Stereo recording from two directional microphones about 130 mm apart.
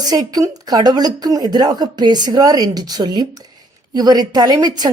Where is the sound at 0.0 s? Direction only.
30° right (ahead or behind).